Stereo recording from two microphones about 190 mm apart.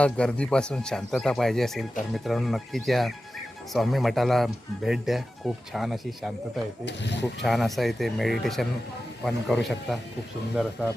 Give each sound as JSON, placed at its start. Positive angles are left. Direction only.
{"t": 0.0, "sound": "speech", "side_deg": 5}
{"t": 6.8, "sound": "speech", "side_deg": 65}
{"t": 7.4, "sound": "speech", "side_deg": 0}